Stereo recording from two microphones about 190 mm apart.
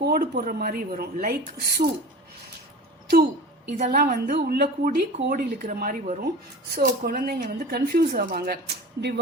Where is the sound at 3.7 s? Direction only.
45° right (ahead or behind).